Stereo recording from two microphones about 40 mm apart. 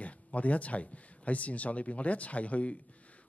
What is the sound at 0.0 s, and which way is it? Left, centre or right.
Speech, left.